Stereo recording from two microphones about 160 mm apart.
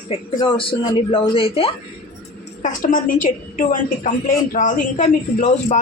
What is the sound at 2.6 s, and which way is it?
A woman's voice, 55° left (ahead or behind).